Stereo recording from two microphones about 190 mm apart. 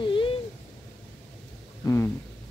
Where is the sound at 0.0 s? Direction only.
25° left (ahead or behind).